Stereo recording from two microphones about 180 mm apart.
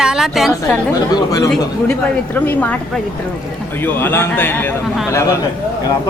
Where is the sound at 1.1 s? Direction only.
20° left (ahead or behind).